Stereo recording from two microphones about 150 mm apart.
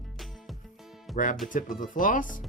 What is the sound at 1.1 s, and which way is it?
Speech, 60° left (ahead or behind).